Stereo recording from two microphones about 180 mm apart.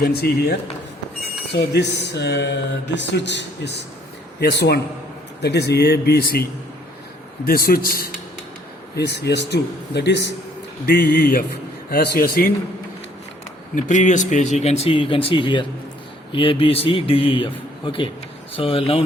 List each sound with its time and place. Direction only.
0.0 s speech: 60° left (ahead or behind)
1.5 s a man's voice: 70° left (ahead or behind); by 8.1 s 55° left (ahead or behind)
9.0 s speech: 70° left (ahead or behind)
10.8 s speech: 55° left (ahead or behind)
13.7 s speech: 45° left (ahead or behind)